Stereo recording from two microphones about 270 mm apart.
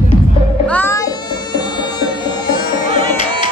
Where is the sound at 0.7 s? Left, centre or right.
Centre.